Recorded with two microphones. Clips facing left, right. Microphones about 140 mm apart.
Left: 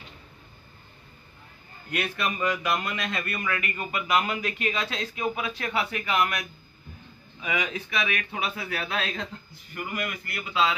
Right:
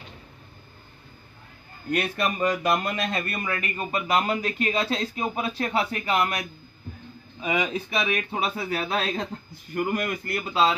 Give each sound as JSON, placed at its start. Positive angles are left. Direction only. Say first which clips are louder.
{"t": 1.9, "sound": "speech", "louder": "right 4 dB", "side_deg": -40}
{"t": 7.4, "sound": "speech", "louder": "right 4 dB", "side_deg": -30}